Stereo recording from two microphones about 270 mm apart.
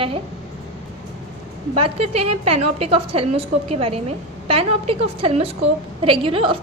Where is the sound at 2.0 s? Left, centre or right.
Right.